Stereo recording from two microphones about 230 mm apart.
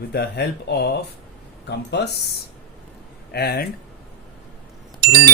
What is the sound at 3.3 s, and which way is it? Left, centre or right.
Speech, left.